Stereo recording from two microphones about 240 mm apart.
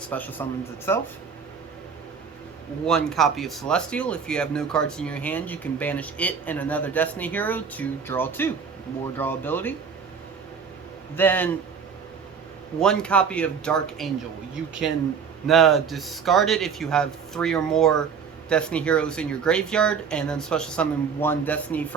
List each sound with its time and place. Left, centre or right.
0.1 s speech: centre
2.8 s speech: centre
11.2 s speech: centre
12.8 s speech: centre
15.4 s speech: centre